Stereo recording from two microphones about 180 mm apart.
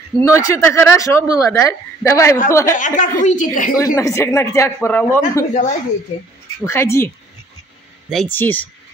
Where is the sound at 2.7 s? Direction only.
45° left (ahead or behind).